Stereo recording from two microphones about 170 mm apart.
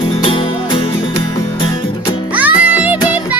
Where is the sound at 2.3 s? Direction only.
10° right (ahead or behind).